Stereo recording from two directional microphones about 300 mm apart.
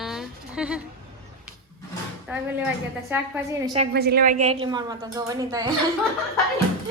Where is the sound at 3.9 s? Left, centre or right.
Right.